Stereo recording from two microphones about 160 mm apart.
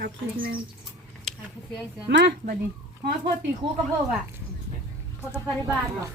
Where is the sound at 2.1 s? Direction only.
90° right.